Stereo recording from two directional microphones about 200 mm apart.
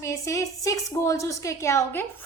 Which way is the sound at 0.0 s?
15° left (ahead or behind).